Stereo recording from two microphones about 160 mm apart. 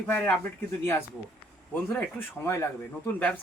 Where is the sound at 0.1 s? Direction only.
10° left (ahead or behind).